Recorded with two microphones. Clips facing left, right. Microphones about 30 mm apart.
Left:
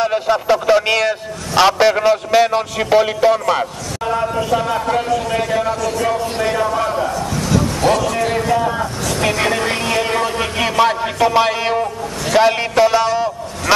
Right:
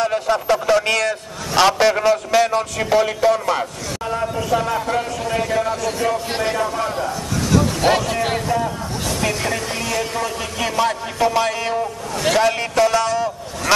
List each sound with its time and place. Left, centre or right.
0.0 s a man's voice: centre
5.8 s speech: centre
6.5 s a sound: centre
8.1 s speech: centre
8.4 s speech: centre
9.1 s a sound: left
9.4 s music: left
9.8 s speech: left